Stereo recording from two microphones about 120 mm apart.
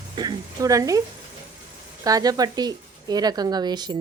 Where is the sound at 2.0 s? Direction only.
30° right (ahead or behind).